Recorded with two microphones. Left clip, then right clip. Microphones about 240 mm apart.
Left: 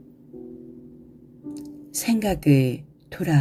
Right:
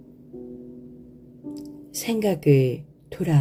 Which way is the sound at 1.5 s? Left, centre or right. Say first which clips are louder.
Left 2 dB; left.